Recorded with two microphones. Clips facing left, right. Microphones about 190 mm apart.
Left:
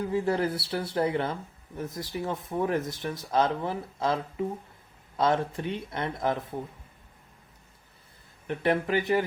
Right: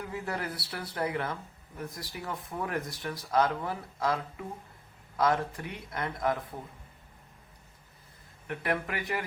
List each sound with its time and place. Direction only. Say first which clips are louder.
0.0 s speech: left 9 dB; 30° left (ahead or behind)
8.4 s speech: left 6 dB; 25° left (ahead or behind)